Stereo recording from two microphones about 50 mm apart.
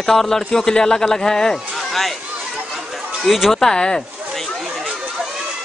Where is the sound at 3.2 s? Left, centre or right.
Centre.